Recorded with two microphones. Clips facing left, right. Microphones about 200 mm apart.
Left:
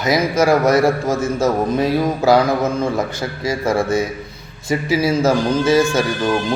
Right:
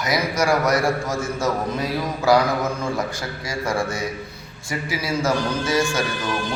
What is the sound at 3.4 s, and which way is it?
Speech, 25° left (ahead or behind).